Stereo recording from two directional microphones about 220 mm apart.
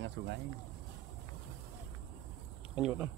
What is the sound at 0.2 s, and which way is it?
Speech, 45° right (ahead or behind).